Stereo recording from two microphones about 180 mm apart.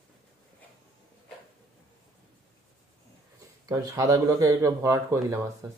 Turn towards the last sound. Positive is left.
turn(degrees=-20)  # may be behind; listen again after turning